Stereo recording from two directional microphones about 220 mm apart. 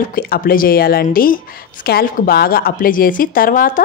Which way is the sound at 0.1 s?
40° left (ahead or behind).